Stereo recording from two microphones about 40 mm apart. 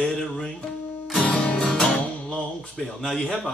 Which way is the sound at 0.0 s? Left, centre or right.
Centre.